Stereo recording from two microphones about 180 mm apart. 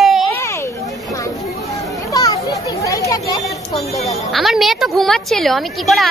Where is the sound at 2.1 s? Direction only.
20° left (ahead or behind).